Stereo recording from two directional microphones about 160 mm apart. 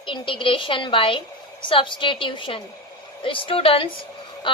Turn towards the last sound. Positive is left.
turn(degrees=30)  # may be behind; listen again after turning